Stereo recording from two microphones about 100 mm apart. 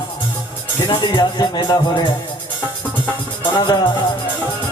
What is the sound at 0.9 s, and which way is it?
Speech, 50° left (ahead or behind).